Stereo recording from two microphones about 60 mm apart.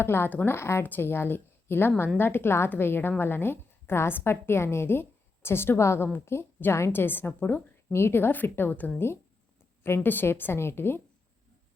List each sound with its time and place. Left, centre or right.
0.0 s a woman's voice: left
7.9 s a woman's voice: left